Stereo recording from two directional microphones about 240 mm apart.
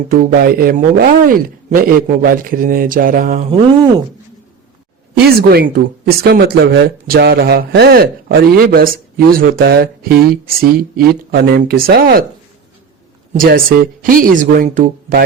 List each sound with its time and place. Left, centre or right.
0.1 s speech: right
3.5 s speech: right
5.5 s speech: right
13.4 s speech: right